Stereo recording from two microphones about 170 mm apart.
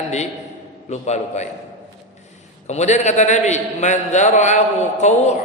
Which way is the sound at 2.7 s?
40° left (ahead or behind).